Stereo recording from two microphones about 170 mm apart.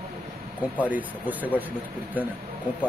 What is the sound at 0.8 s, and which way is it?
Speech, 10° right (ahead or behind).